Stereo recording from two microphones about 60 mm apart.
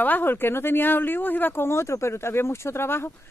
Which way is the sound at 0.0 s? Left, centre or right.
Left.